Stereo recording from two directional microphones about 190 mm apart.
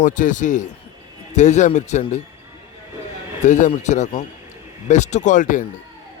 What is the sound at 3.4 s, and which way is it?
A man's voice, 40° left (ahead or behind).